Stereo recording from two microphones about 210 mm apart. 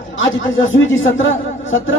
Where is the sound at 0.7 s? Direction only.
65° left (ahead or behind).